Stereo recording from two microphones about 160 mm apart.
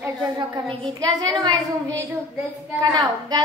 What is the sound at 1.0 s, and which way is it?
A woman's voice, 25° right (ahead or behind).